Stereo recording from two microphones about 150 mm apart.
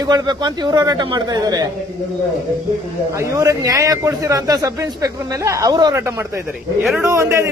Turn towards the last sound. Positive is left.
turn(degrees=-20)  # may be behind; listen again after turning